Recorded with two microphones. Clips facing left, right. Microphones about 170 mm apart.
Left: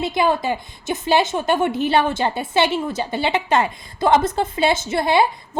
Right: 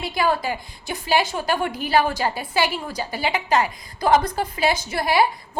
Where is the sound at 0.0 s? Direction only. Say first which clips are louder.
Left 3 dB; 20° left (ahead or behind).